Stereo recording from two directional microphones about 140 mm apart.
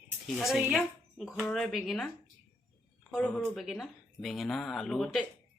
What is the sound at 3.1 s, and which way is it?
Speech, 10° left (ahead or behind).